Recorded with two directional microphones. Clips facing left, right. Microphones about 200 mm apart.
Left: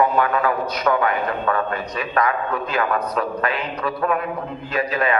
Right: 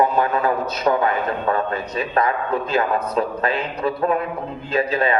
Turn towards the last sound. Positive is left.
turn(degrees=-25)  # may be behind; listen again after turning